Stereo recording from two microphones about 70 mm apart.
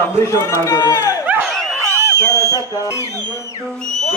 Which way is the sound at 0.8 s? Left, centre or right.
Left.